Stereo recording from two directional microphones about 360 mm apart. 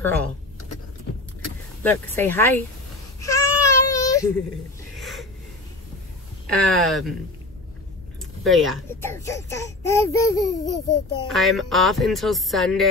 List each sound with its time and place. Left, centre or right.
1.8 s speech: centre
3.2 s baby cry: centre
4.9 s a sound: centre
6.4 s speech: centre
8.5 s speech: centre